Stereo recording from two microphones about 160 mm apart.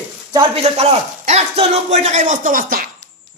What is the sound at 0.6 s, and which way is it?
A man's voice, 45° right (ahead or behind).